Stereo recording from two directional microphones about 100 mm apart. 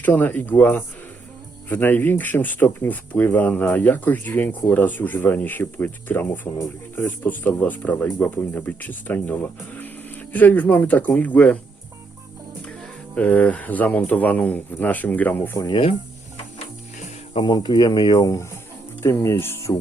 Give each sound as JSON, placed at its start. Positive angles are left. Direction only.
{"t": 0.0, "sound": "speech", "side_deg": 15}
{"t": 13.1, "sound": "speech", "side_deg": 15}
{"t": 15.5, "sound": "speech", "side_deg": 45}
{"t": 17.4, "sound": "speech", "side_deg": 45}
{"t": 19.0, "sound": "speech", "side_deg": 25}